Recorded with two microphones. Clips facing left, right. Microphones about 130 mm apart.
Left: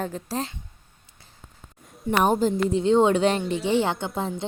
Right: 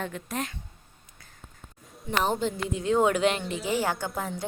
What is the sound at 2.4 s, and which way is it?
A woman's voice, 30° left (ahead or behind).